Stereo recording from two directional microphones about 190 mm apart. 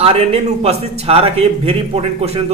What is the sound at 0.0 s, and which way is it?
Speech, 30° right (ahead or behind).